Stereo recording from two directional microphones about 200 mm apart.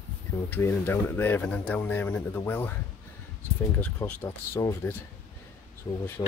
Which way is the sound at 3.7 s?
10° left (ahead or behind).